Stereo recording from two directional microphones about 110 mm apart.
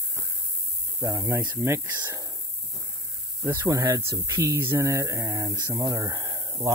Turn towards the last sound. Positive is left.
turn(degrees=-35)  # may be behind; listen again after turning